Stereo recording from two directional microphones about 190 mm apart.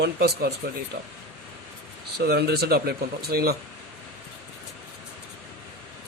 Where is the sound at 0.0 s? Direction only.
55° right (ahead or behind).